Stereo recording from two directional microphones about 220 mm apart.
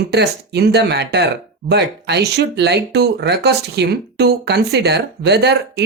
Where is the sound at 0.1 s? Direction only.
50° right (ahead or behind).